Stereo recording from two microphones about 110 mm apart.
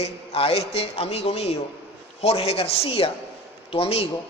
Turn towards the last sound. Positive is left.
turn(degrees=65)  # may be behind; listen again after turning